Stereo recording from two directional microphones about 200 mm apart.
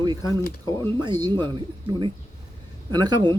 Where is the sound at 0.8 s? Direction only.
20° right (ahead or behind).